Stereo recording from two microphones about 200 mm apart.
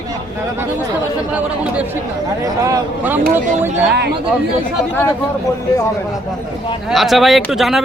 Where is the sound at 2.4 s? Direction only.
15° right (ahead or behind).